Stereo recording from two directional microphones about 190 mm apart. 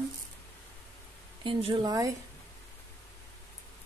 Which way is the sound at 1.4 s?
30° right (ahead or behind).